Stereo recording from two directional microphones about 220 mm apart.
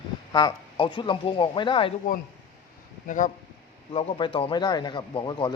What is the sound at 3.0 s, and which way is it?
Speech, 35° left (ahead or behind).